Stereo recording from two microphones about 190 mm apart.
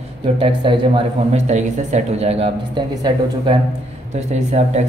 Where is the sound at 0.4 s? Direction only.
30° right (ahead or behind).